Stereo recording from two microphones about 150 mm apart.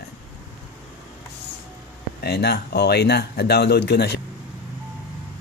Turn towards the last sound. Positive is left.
turn(degrees=90)